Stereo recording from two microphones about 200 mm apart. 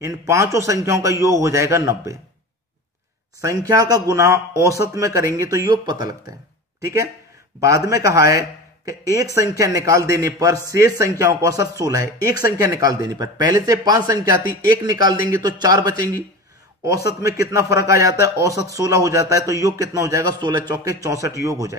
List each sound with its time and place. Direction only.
0.0 s a man's voice: 15° right (ahead or behind)
3.3 s a man's voice: 15° right (ahead or behind)
7.6 s a man's voice: 15° right (ahead or behind)
17.2 s a man's voice: 15° right (ahead or behind)